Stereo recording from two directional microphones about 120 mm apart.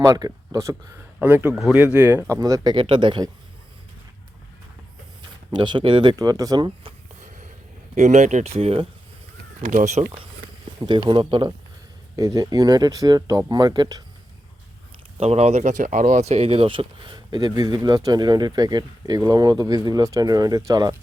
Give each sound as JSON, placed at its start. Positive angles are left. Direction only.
{"t": 0.0, "sound": "speech", "side_deg": -30}
{"t": 2.3, "sound": "speech", "side_deg": -30}
{"t": 2.7, "sound": "speech", "side_deg": -45}
{"t": 5.5, "sound": "speech", "side_deg": -40}
{"t": 7.2, "sound": "a sound", "side_deg": -90}
{"t": 7.9, "sound": "speech", "side_deg": -75}
{"t": 9.6, "sound": "speech", "side_deg": -85}
{"t": 10.8, "sound": "speech", "side_deg": -40}
{"t": 12.1, "sound": "speech", "side_deg": -30}
{"t": 15.2, "sound": "speech", "side_deg": -60}